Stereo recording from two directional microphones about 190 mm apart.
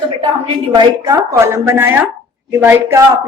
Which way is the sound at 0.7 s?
20° right (ahead or behind).